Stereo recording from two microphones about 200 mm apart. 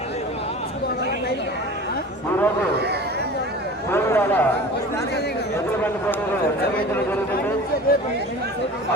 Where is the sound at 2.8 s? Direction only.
55° right (ahead or behind).